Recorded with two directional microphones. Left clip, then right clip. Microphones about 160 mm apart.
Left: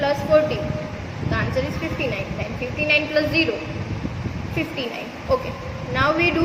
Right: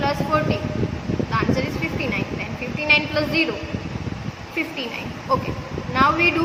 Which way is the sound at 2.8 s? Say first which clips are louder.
Right 1 dB; 20° right (ahead or behind).